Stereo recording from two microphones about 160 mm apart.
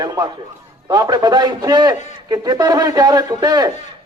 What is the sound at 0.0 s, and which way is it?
Speech, 25° right (ahead or behind).